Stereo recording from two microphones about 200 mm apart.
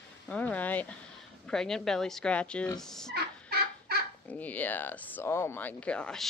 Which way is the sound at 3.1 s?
50° right (ahead or behind).